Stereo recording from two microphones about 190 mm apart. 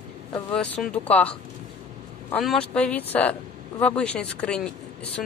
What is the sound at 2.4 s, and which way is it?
Speech, 5° left (ahead or behind).